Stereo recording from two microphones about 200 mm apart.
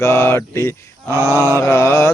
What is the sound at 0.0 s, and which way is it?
Speech, 15° left (ahead or behind).